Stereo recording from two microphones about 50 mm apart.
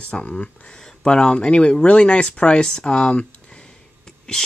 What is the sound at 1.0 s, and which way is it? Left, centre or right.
Speech, centre.